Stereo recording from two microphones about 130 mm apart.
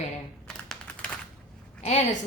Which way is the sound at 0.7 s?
10° left (ahead or behind).